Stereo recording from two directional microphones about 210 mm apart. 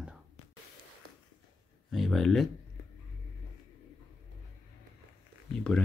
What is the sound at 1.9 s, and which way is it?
Speech, centre (ahead or behind).